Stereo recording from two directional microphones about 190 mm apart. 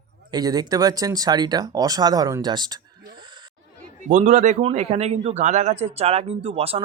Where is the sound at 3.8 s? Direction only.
40° right (ahead or behind).